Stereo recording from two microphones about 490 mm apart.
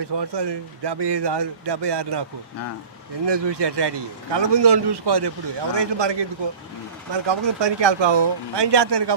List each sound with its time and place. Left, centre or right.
0.0 s speech: right
3.2 s speech: right